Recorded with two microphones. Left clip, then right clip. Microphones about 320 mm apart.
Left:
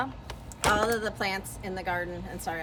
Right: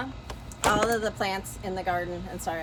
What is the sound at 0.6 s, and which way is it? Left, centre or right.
A woman's voice, centre.